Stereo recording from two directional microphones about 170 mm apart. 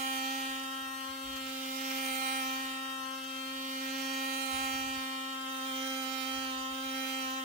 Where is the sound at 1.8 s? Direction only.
50° right (ahead or behind).